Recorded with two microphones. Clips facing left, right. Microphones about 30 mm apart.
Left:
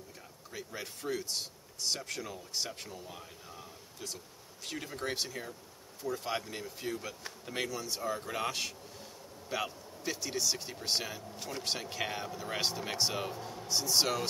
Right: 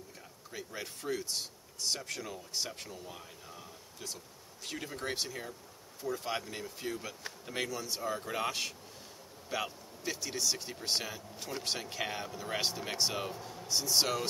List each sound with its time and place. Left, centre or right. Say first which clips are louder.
0.5 s speech: even; centre